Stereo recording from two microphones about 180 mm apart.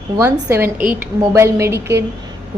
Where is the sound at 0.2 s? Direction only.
15° right (ahead or behind).